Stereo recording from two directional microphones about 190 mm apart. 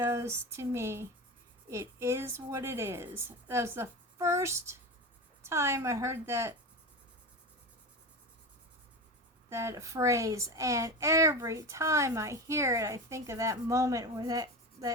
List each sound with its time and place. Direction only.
0.0 s a child's voice: 15° right (ahead or behind)
9.5 s a child's voice: 15° right (ahead or behind)